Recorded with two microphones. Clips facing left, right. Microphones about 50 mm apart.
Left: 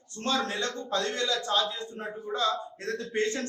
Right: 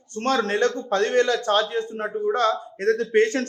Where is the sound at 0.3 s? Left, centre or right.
Right.